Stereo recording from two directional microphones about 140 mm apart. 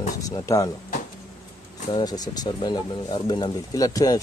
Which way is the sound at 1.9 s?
30° left (ahead or behind).